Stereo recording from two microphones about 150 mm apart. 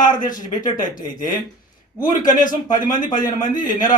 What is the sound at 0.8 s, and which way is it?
Speech, 65° left (ahead or behind).